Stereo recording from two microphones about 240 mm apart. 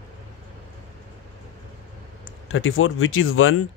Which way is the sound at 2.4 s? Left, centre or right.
Left.